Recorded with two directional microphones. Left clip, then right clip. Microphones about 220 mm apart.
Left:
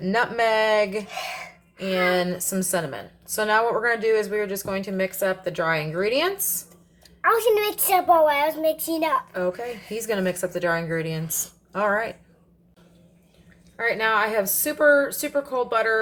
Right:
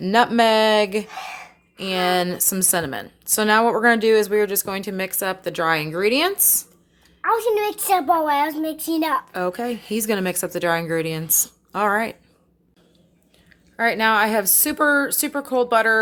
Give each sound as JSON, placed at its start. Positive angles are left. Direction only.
{"t": 0.0, "sound": "a woman's voice", "side_deg": -45}
{"t": 1.1, "sound": "gasp", "side_deg": -15}
{"t": 1.8, "sound": "a woman's voice", "side_deg": -45}
{"t": 7.2, "sound": "a woman's voice", "side_deg": -5}
{"t": 9.3, "sound": "a woman's voice", "side_deg": -45}
{"t": 13.7, "sound": "a woman's voice", "side_deg": -50}